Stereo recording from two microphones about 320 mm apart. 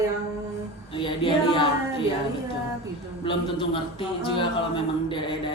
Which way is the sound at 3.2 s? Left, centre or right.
Centre.